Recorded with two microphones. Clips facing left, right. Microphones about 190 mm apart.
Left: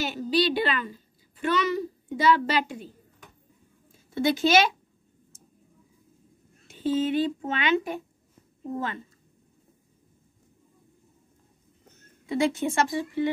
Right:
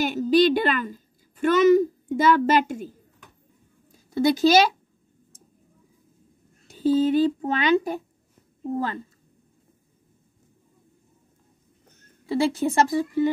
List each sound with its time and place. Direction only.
0.0 s a woman's voice: 50° right (ahead or behind)
4.1 s speech: 40° right (ahead or behind)
6.7 s speech: 40° right (ahead or behind)
12.3 s speech: 35° right (ahead or behind)